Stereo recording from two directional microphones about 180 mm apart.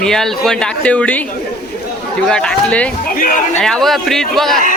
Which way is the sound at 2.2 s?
5° left (ahead or behind).